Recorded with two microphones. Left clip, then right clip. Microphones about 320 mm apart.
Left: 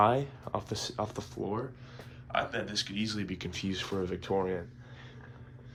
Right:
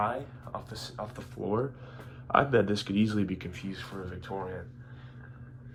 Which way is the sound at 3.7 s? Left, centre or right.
Left.